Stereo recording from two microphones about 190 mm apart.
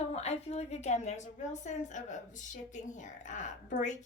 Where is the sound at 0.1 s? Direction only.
35° left (ahead or behind).